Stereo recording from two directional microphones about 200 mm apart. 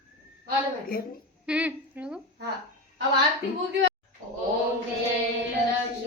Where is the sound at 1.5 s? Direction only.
5° right (ahead or behind).